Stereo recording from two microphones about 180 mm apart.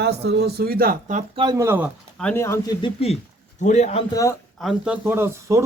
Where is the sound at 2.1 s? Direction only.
10° left (ahead or behind).